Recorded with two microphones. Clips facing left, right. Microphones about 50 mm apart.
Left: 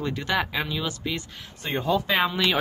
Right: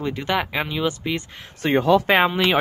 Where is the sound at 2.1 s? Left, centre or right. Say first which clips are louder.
Right 6 dB; right.